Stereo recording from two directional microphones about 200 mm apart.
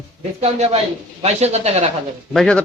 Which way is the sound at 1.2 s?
30° right (ahead or behind).